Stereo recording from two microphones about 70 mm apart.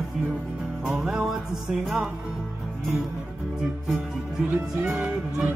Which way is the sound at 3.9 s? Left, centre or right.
Centre.